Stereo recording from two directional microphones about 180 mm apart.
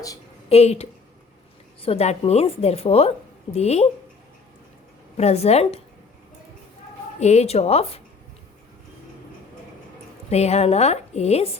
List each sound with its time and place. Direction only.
0.4 s a woman's voice: 35° left (ahead or behind)
5.1 s a woman's voice: 35° left (ahead or behind)
7.2 s a woman's voice: 35° left (ahead or behind)
10.2 s a woman's voice: 35° left (ahead or behind)